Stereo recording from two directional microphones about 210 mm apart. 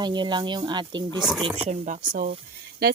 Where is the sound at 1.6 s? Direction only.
35° right (ahead or behind).